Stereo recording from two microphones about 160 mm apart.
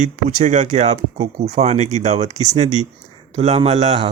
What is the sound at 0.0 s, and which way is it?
Speech, 50° right (ahead or behind).